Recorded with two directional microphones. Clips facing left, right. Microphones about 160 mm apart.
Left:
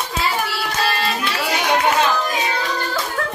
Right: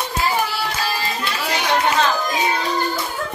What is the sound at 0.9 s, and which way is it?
Music, 70° left (ahead or behind).